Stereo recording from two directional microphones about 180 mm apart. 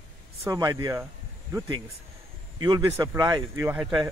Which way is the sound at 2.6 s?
20° right (ahead or behind).